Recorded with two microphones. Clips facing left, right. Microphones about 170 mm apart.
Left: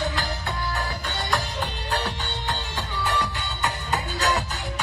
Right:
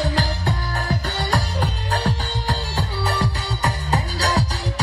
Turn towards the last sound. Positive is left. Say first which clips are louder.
# right 3 dB
turn(degrees=-40)  # may be behind; listen again after turning